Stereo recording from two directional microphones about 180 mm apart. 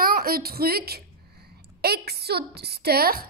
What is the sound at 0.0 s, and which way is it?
A woman's voice, 55° right (ahead or behind).